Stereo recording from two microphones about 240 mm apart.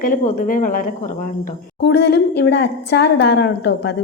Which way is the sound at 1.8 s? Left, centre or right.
Left.